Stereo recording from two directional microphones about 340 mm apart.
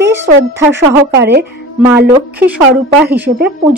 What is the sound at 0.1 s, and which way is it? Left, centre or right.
Speech, centre.